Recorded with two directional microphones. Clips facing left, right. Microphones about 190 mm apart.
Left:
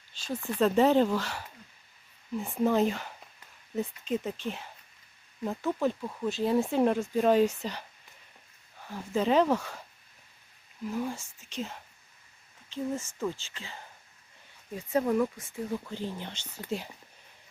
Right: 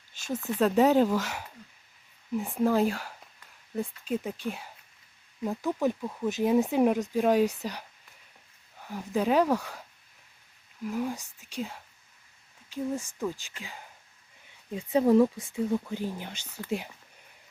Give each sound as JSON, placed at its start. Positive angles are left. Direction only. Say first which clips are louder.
{"t": 0.3, "sound": "speech", "louder": "right 1 dB", "side_deg": -5}
{"t": 10.8, "sound": "speech", "louder": "right 2 dB", "side_deg": -15}
{"t": 12.7, "sound": "speech", "louder": "right 1 dB", "side_deg": -10}
{"t": 15.0, "sound": "speech", "louder": "right 8 dB", "side_deg": -30}
{"t": 15.4, "sound": "speech", "louder": "right 6 dB", "side_deg": -15}